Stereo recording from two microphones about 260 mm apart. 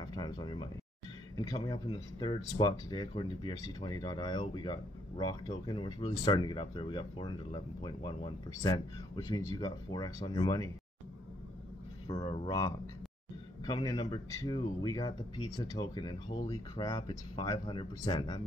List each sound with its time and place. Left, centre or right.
0.0 s speech: centre
12.1 s speech: left